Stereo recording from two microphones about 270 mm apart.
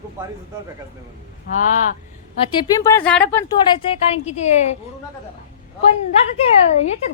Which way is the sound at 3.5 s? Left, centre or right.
Centre.